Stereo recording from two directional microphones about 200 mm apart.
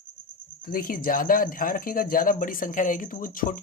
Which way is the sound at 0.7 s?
45° left (ahead or behind).